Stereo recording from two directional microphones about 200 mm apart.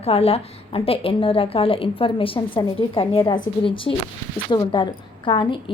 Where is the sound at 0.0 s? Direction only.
30° left (ahead or behind).